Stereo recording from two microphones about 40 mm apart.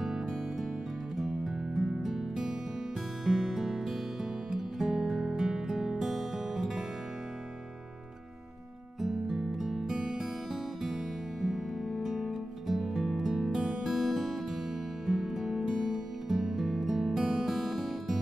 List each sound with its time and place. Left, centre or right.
1.1 s music: centre
9.0 s music: centre
10.5 s music: centre
13.8 s music: centre
15.6 s music: right
16.3 s music: centre